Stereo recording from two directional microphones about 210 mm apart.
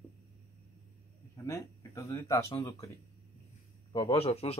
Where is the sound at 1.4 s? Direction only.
15° left (ahead or behind).